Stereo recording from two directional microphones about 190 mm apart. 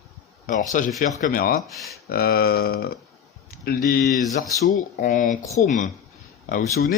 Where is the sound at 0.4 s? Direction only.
45° left (ahead or behind).